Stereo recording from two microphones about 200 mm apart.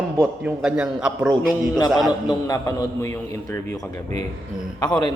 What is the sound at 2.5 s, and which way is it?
A man's voice, 15° left (ahead or behind).